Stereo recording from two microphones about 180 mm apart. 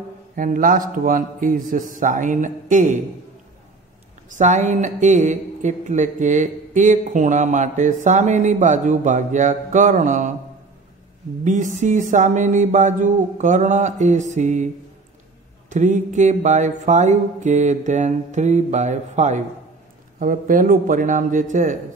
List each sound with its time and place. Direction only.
0.4 s speech: 50° right (ahead or behind)
4.3 s speech: 40° right (ahead or behind)
11.4 s speech: 45° right (ahead or behind)
15.7 s music: 40° right (ahead or behind)
20.2 s speech: 50° right (ahead or behind)